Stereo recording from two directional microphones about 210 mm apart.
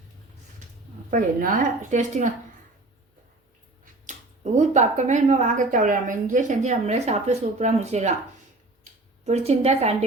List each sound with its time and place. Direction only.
1.1 s a woman's voice: 40° right (ahead or behind)
4.5 s a woman's voice: 35° right (ahead or behind)
8.8 s a sound: 30° right (ahead or behind)